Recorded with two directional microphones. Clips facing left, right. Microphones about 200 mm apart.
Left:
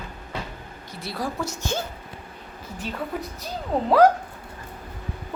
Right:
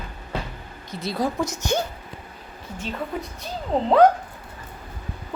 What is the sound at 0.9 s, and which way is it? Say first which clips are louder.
Speech: right 5 dB; 20° right (ahead or behind).